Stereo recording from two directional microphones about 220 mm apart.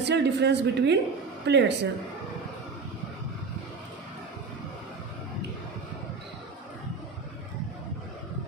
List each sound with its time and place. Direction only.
0.0 s speech: 50° right (ahead or behind)